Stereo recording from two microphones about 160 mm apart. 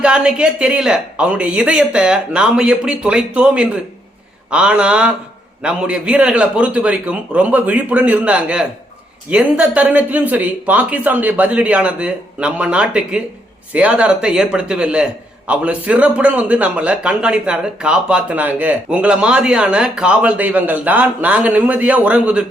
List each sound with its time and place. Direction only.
0.0 s speech: 5° right (ahead or behind)